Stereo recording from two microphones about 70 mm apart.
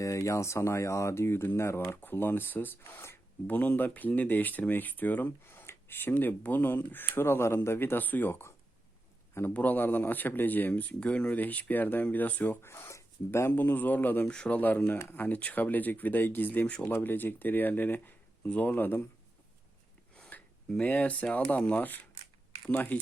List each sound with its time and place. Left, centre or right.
0.0 s speech: left
3.4 s speech: left
9.5 s speech: left
12.6 s speech: left
14.3 s speech: centre
14.6 s speech: left
20.1 s speech: centre